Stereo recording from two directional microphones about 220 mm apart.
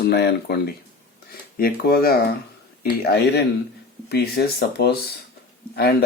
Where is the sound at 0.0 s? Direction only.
50° left (ahead or behind).